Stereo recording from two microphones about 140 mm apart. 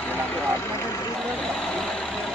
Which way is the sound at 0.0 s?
10° left (ahead or behind).